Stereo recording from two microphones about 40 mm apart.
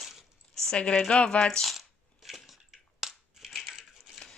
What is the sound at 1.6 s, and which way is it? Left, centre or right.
Crushing, centre.